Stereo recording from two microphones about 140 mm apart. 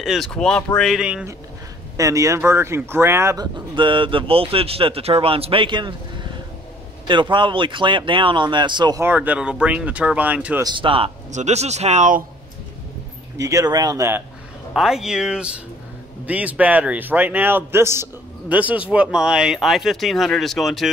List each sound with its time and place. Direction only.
0.0 s speech: centre (ahead or behind)
2.0 s speech: 20° right (ahead or behind)
3.5 s speech: 35° right (ahead or behind)
9.0 s a man's voice: 10° right (ahead or behind)
10.6 s speech: 35° right (ahead or behind)
11.3 s speech: 55° right (ahead or behind)
13.4 s speech: 25° right (ahead or behind)
14.7 s a man's voice: centre (ahead or behind)